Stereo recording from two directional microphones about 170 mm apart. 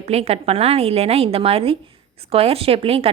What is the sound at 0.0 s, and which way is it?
Speech, 40° right (ahead or behind).